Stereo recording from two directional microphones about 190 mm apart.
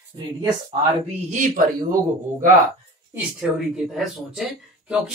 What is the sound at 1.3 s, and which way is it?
Speech, 40° right (ahead or behind).